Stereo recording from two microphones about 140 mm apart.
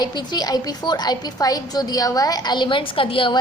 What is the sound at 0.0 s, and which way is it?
A woman's voice, 30° left (ahead or behind).